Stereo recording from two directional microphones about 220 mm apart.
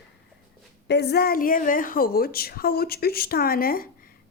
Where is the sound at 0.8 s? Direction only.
50° left (ahead or behind).